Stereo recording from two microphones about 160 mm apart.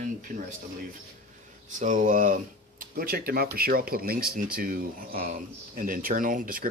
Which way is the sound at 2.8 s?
70° right (ahead or behind).